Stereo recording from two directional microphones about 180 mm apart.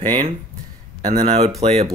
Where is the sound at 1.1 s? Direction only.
35° right (ahead or behind).